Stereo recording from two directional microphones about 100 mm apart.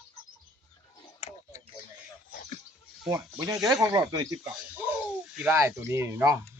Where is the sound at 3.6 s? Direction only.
5° right (ahead or behind).